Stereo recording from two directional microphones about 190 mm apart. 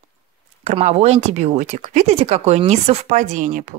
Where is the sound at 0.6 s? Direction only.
35° right (ahead or behind).